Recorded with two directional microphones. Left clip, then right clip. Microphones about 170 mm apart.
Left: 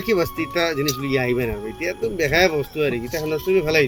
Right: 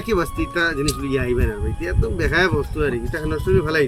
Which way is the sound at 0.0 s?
20° right (ahead or behind).